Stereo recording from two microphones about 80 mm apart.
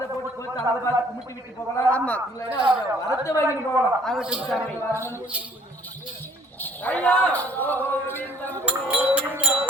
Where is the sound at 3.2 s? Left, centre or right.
Left.